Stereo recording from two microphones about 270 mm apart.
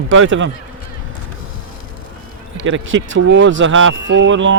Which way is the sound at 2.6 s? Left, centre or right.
Right.